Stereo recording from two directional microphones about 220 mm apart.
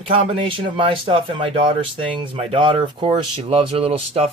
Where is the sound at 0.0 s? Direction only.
25° right (ahead or behind).